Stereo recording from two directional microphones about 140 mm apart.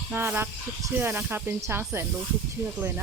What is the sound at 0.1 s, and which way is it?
Speech, 15° right (ahead or behind).